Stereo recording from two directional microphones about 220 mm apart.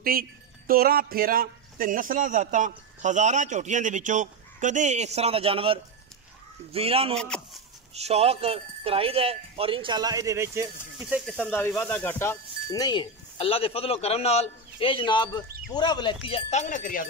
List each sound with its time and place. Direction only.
0.0 s speech: 40° right (ahead or behind); by 7.2 s 25° right (ahead or behind)
7.2 s speech: 5° left (ahead or behind)
7.9 s speech: 30° right (ahead or behind); by 11.3 s 5° right (ahead or behind)
11.3 s speech: 10° left (ahead or behind); by 17.1 s 35° left (ahead or behind)